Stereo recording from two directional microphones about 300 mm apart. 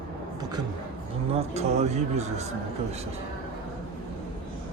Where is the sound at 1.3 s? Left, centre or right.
Right.